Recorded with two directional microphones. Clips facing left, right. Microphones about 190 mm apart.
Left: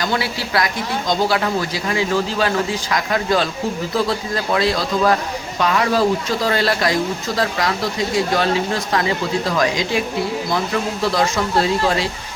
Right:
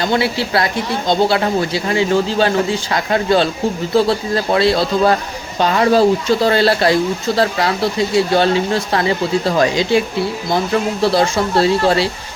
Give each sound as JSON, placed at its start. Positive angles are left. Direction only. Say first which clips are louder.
{"t": 0.0, "sound": "speech", "louder": "right 5 dB", "side_deg": -25}
{"t": 11.0, "sound": "speech", "louder": "right 4 dB", "side_deg": -30}